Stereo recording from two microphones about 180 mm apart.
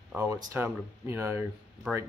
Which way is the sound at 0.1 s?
10° right (ahead or behind).